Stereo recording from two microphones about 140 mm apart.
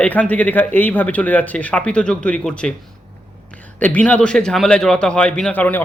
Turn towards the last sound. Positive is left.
turn(degrees=10)  # may be behind; listen again after turning